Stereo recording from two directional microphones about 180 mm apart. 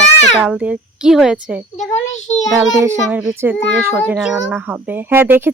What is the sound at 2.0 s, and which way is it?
Speech, 40° left (ahead or behind).